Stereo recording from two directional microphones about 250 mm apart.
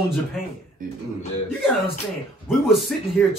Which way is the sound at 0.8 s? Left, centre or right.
Right.